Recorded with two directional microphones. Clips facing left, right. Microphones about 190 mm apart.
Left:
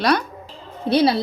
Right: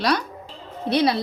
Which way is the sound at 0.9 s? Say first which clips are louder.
Left 3 dB; 30° left (ahead or behind).